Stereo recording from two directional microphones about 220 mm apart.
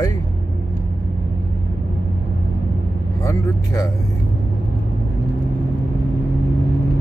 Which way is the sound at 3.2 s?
15° left (ahead or behind).